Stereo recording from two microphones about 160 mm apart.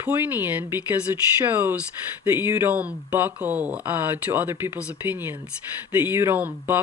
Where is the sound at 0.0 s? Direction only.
15° right (ahead or behind).